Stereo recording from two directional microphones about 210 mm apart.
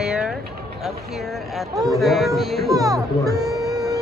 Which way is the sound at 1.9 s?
Centre (ahead or behind).